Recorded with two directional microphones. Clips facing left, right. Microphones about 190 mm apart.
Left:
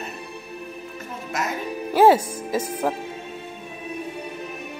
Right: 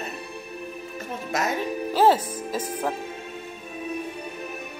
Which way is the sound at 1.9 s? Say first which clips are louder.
Left 4 dB; 10° left (ahead or behind).